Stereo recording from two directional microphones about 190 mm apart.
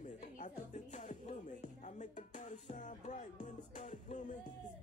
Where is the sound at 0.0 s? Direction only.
40° left (ahead or behind).